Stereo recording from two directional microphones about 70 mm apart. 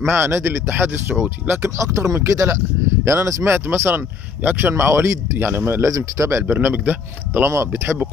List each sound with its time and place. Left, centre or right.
0.0 s speech: right
1.8 s speech: right
3.4 s speech: right
3.9 s speech: right
5.9 s speech: right
6.4 s speech: right
7.4 s speech: right